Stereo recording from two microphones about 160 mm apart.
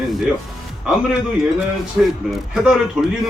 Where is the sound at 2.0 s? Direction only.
10° right (ahead or behind).